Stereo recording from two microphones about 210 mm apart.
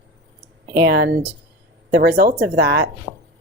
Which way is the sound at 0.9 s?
50° right (ahead or behind).